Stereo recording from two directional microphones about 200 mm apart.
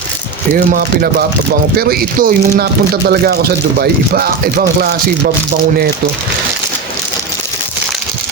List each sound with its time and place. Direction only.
0.5 s speech: 45° right (ahead or behind)